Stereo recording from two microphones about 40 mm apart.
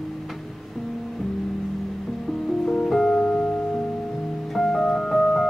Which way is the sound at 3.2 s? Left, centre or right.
Left.